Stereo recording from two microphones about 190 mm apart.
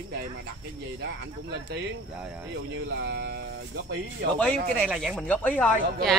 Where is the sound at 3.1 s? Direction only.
60° right (ahead or behind).